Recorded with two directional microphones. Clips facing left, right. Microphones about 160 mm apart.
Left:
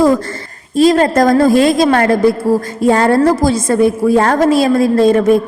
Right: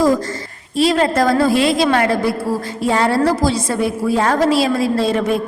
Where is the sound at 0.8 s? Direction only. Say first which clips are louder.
Left 5 dB; 45° left (ahead or behind).